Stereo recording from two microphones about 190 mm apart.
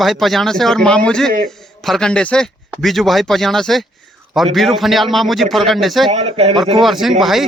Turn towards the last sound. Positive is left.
turn(degrees=0)  # may be behind; listen again after turning